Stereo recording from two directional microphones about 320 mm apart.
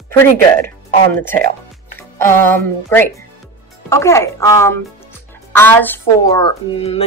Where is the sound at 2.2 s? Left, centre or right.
Centre.